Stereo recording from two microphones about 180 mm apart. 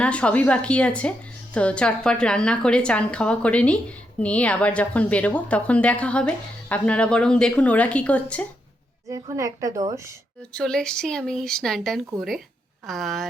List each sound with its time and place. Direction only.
0.0 s a woman's voice: 5° left (ahead or behind)
9.0 s a woman's voice: 20° right (ahead or behind)
10.5 s a woman's voice: 5° left (ahead or behind)